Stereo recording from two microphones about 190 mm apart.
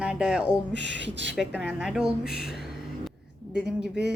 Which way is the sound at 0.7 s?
70° right (ahead or behind).